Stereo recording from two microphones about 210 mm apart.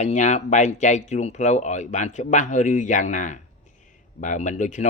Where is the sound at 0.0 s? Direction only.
35° left (ahead or behind).